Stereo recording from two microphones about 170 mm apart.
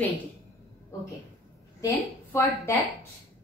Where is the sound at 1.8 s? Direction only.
15° left (ahead or behind).